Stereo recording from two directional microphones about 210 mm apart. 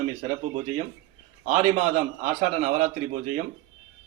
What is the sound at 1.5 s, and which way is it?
A man's voice, 35° right (ahead or behind).